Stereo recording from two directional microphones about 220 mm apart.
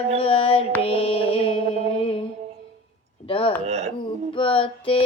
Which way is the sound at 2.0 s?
25° left (ahead or behind).